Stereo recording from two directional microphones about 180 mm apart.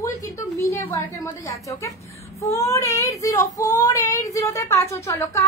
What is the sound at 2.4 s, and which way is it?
Speech, 15° left (ahead or behind).